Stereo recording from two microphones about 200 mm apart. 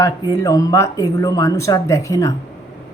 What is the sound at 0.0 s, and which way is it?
Speech, 15° left (ahead or behind).